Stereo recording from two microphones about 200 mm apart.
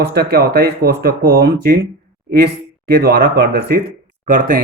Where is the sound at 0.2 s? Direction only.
50° right (ahead or behind).